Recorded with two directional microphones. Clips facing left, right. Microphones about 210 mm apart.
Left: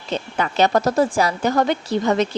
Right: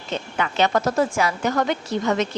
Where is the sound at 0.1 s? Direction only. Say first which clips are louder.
Left 2 dB; 35° left (ahead or behind).